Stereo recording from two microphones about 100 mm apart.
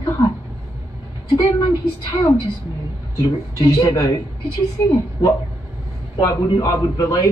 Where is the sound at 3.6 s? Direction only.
35° left (ahead or behind).